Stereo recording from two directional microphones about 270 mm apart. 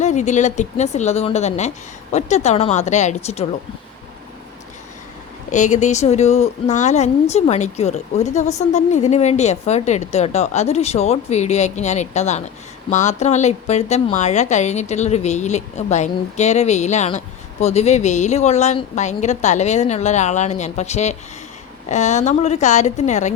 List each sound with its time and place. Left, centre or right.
0.0 s a woman's voice: left
5.5 s a woman's voice: left